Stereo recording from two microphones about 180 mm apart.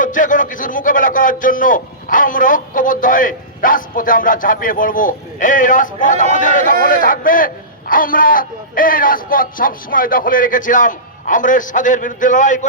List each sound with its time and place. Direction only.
0.0 s a man's voice: 45° left (ahead or behind)